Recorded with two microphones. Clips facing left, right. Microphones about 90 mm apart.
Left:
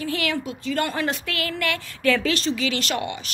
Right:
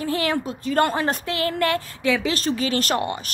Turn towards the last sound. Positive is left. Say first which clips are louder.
# right 4 dB
turn(degrees=-40)  # may be behind; listen again after turning